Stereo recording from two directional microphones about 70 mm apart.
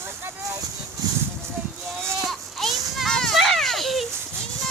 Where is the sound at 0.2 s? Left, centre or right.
Right.